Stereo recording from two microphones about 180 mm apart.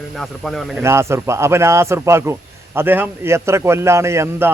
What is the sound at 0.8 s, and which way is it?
A man's voice, 15° right (ahead or behind).